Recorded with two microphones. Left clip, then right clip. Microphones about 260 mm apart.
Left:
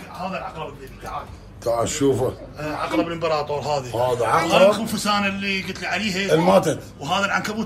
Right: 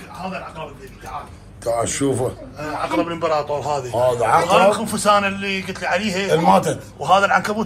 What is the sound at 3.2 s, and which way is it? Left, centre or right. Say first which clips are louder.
Speech: right 2 dB; right.